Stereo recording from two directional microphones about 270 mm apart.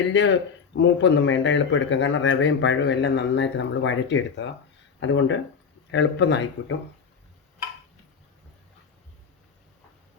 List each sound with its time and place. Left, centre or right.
0.1 s speech: left